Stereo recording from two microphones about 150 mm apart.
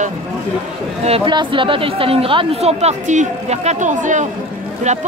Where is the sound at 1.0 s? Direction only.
35° right (ahead or behind).